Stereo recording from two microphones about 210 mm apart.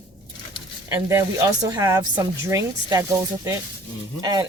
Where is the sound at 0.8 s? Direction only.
15° right (ahead or behind).